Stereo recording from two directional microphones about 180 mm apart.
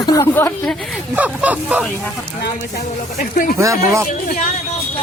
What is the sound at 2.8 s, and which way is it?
Speech, 45° left (ahead or behind).